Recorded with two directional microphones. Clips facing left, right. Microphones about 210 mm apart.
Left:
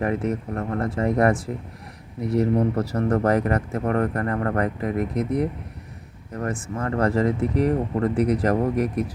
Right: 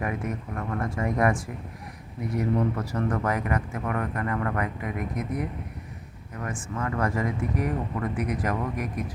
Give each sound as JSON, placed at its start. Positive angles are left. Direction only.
{"t": 0.0, "sound": "speech", "side_deg": 35}